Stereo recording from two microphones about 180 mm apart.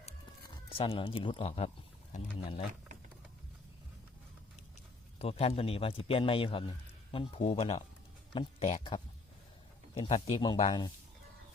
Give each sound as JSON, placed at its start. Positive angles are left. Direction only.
{"t": 0.4, "sound": "speech", "side_deg": 30}
{"t": 5.2, "sound": "a man's voice", "side_deg": 35}